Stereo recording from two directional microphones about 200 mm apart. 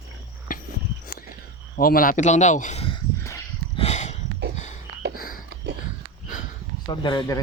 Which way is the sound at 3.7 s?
35° left (ahead or behind).